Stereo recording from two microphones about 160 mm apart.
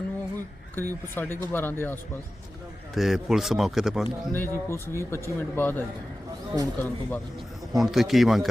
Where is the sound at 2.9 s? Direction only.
Centre (ahead or behind).